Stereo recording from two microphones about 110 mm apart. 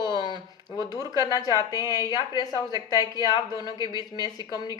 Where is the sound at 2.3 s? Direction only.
40° left (ahead or behind).